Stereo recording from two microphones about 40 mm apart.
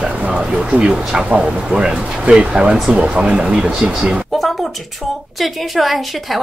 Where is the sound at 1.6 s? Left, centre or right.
Centre.